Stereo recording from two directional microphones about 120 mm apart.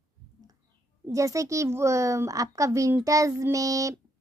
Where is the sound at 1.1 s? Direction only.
25° right (ahead or behind).